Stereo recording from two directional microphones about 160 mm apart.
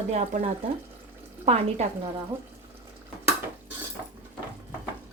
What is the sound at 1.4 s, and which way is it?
Speech, 40° right (ahead or behind).